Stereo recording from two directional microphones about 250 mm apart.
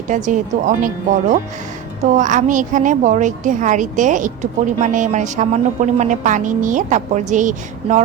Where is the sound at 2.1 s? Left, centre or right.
Right.